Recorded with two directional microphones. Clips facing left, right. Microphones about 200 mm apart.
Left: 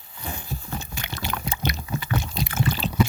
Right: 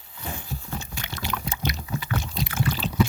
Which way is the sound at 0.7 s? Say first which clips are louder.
Left 1 dB; 60° left (ahead or behind).